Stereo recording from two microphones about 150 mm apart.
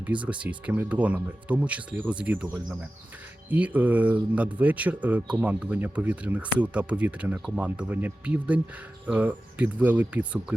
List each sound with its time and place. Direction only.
0.0 s speech: 10° right (ahead or behind)